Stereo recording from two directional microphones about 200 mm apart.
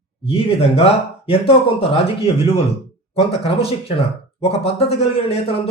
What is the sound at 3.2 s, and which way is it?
Speech, 30° left (ahead or behind).